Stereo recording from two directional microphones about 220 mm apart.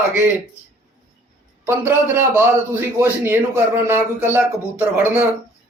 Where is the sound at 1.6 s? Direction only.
10° right (ahead or behind).